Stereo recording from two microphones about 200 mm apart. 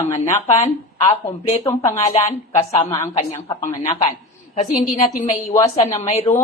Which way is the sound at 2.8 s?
15° left (ahead or behind).